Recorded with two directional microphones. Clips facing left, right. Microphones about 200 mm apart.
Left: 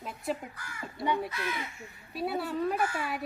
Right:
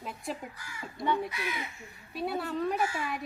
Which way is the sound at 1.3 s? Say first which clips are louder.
Left 1 dB; 15° right (ahead or behind).